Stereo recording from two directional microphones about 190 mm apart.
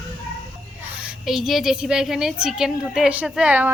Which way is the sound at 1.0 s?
Centre (ahead or behind).